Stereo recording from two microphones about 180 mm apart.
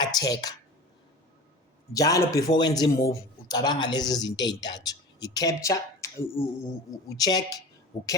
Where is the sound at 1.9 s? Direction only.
20° left (ahead or behind).